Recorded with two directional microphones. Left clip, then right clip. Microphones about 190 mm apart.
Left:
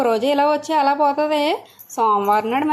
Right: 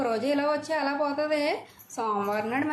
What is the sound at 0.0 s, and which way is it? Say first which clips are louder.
Speech: left 9 dB; 30° left (ahead or behind).